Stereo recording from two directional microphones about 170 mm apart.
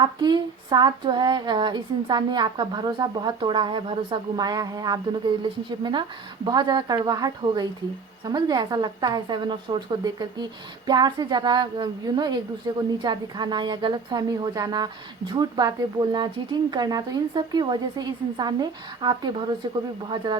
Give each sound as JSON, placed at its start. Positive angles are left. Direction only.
{"t": 0.0, "sound": "a woman's voice", "side_deg": -25}